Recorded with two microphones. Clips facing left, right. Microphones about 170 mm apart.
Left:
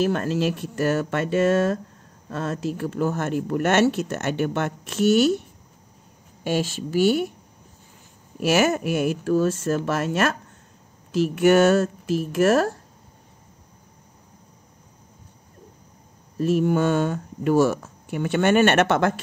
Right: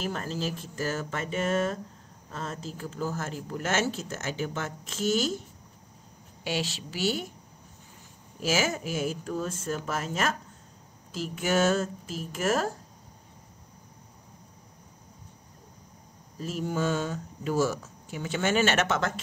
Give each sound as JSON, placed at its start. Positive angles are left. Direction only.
{"t": 0.0, "sound": "speech", "side_deg": 70}
{"t": 2.3, "sound": "speech", "side_deg": 70}
{"t": 6.4, "sound": "a woman's voice", "side_deg": 50}
{"t": 8.4, "sound": "speech", "side_deg": 65}
{"t": 16.3, "sound": "speech", "side_deg": 70}